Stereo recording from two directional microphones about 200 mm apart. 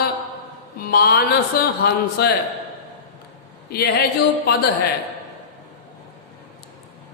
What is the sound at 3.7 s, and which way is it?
Mantra, 50° left (ahead or behind).